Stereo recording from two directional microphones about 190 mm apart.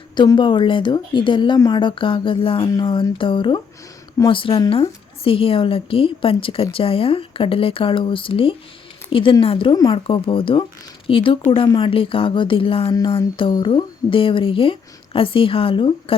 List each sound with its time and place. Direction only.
0.2 s speech: 25° left (ahead or behind)